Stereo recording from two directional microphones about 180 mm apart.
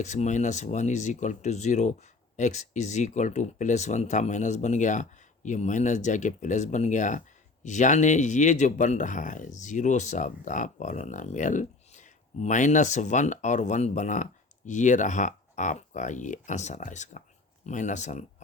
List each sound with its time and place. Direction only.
0.0 s speech: 40° left (ahead or behind)